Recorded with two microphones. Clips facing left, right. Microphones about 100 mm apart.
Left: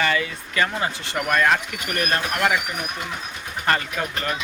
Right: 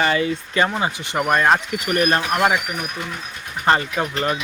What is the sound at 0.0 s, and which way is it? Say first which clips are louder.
Speech: right 4 dB; 30° right (ahead or behind).